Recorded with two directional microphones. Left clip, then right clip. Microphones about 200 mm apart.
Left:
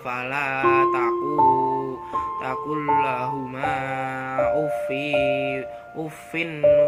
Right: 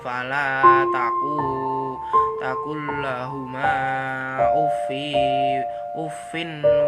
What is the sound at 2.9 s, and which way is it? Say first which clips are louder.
Music: left 9 dB; 15° right (ahead or behind).